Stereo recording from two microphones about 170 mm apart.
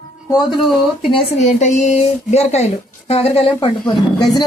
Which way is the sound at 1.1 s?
40° left (ahead or behind).